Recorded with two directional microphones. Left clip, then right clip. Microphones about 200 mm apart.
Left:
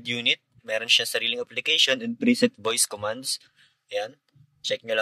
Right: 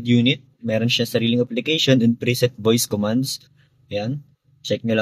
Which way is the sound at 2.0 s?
10° left (ahead or behind).